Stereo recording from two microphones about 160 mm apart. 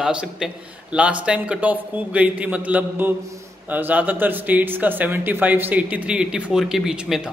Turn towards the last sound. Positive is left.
turn(degrees=-5)  # may be behind; listen again after turning